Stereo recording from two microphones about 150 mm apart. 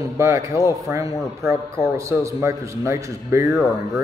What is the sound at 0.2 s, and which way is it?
A man's voice, 20° right (ahead or behind).